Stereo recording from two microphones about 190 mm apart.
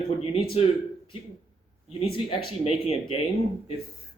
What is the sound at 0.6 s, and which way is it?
Speech, 30° left (ahead or behind).